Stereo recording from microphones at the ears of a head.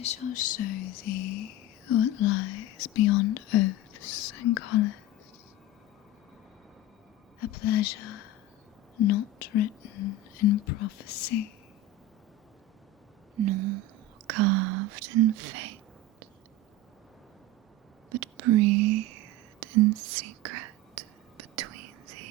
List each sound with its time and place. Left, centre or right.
0.0 s whispering: left
7.3 s whispering: left
13.3 s speech: right
18.1 s whispering: right